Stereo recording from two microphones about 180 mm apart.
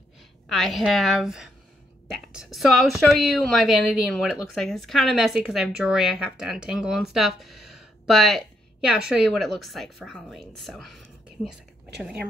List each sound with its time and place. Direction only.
0.5 s speech: centre (ahead or behind)